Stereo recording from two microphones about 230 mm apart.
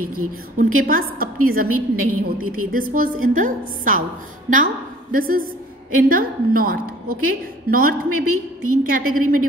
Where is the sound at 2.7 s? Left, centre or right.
Right.